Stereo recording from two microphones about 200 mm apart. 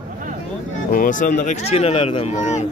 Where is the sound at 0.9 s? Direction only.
40° left (ahead or behind).